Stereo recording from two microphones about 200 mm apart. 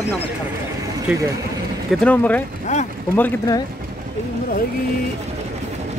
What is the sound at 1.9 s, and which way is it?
Speech, 5° left (ahead or behind).